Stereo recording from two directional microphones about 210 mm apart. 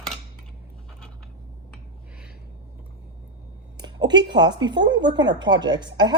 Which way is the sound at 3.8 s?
20° right (ahead or behind).